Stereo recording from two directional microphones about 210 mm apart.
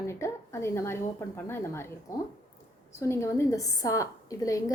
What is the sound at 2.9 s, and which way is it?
A woman's voice, 15° left (ahead or behind).